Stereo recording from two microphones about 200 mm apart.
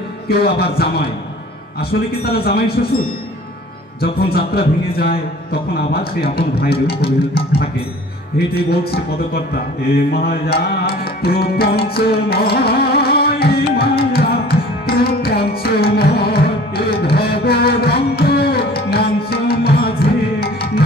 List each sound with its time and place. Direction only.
0.3 s a man's voice: 50° left (ahead or behind)
4.0 s a man's voice: 50° left (ahead or behind)
8.5 s a man's voice: 50° left (ahead or behind)
11.9 s music: 50° left (ahead or behind)
14.9 s carnatic music: 50° left (ahead or behind)
20.3 s tabla: 50° left (ahead or behind)